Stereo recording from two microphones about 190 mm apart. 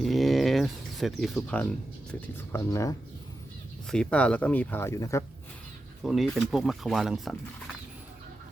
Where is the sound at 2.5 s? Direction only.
15° left (ahead or behind).